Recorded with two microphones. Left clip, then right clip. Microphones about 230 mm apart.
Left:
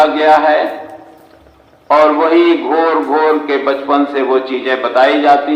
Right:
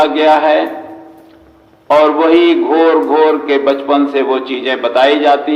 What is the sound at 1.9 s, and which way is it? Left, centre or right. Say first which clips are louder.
A man's voice: right 1 dB; right.